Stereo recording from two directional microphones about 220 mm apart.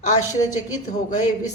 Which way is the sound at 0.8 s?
30° left (ahead or behind).